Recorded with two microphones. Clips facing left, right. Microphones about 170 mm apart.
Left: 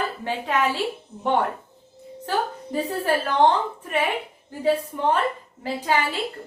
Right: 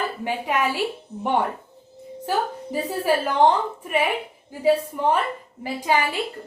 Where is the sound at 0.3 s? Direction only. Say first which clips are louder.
Even; 10° right (ahead or behind).